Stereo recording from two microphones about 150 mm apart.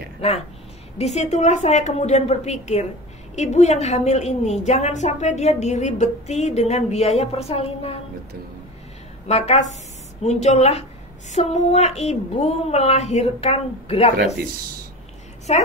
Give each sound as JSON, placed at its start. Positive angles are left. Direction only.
{"t": 0.9, "sound": "a woman's voice", "side_deg": 45}
{"t": 9.3, "sound": "a woman's voice", "side_deg": 50}
{"t": 15.5, "sound": "a woman's voice", "side_deg": 45}